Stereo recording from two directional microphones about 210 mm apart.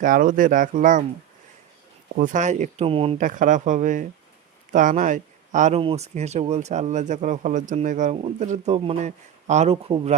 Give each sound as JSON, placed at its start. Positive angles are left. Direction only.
{"t": 0.0, "sound": "speech", "side_deg": -40}
{"t": 2.1, "sound": "speech", "side_deg": -35}
{"t": 3.2, "sound": "speech", "side_deg": -40}